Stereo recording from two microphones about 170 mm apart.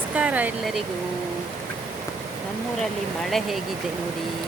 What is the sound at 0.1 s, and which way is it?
Speech, 10° right (ahead or behind).